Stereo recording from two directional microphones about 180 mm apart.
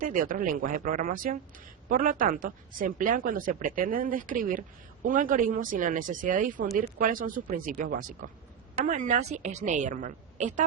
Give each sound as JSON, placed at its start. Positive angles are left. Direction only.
{"t": 0.0, "sound": "a woman's voice", "side_deg": -50}